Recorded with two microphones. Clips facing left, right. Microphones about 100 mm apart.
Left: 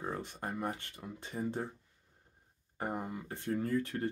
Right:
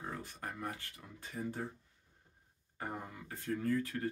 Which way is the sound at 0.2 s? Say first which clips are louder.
Left 5 dB; 25° left (ahead or behind).